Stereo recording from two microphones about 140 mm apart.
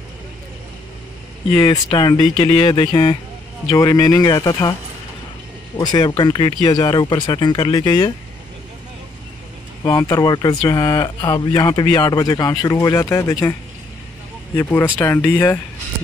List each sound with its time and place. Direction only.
1.9 s speech: 30° left (ahead or behind)
5.8 s speech: 30° left (ahead or behind)
9.8 s speech: 25° left (ahead or behind)